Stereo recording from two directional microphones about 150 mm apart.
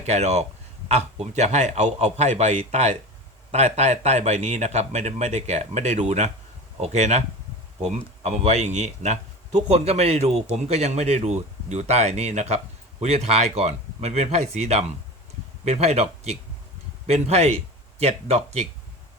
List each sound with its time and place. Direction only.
0.0 s speech: 50° right (ahead or behind)